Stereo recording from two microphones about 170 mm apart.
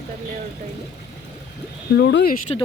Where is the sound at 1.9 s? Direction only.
90° left.